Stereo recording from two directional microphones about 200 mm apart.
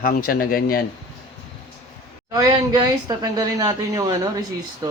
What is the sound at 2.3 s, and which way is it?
Speech, 20° right (ahead or behind).